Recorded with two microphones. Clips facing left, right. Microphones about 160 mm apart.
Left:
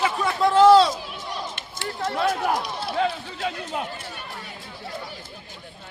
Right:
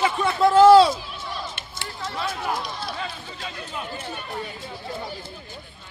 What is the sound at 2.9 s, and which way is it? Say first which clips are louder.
Run: left 9 dB; 70° left (ahead or behind).